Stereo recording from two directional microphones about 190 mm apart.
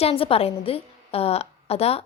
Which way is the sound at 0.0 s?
30° left (ahead or behind).